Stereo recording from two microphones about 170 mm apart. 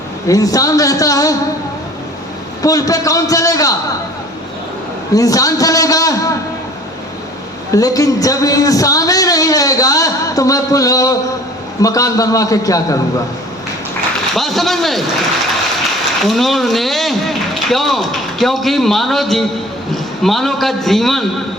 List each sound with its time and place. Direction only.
0.3 s a man's voice: 20° left (ahead or behind)
2.6 s a man's voice: 20° left (ahead or behind)
5.1 s a man's voice: 20° left (ahead or behind)
7.7 s a man's voice: 20° left (ahead or behind)
14.3 s speech: centre (ahead or behind)
16.2 s a man's voice: centre (ahead or behind)